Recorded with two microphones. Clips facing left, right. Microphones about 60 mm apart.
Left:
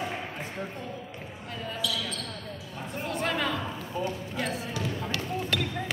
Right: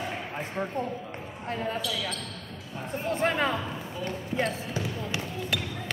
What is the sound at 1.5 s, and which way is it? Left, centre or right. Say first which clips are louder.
Speech: right 3 dB; right.